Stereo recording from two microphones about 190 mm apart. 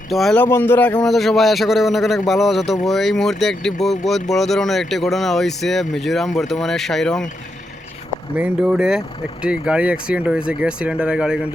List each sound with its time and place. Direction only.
0.1 s speech: centre (ahead or behind)
8.4 s speech: 5° right (ahead or behind)